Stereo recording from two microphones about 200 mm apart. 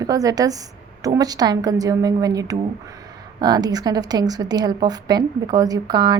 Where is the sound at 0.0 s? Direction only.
15° right (ahead or behind).